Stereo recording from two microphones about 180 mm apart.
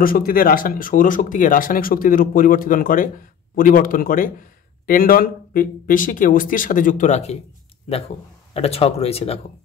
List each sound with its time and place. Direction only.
0.0 s speech: 50° left (ahead or behind)
8.5 s speech: 35° left (ahead or behind)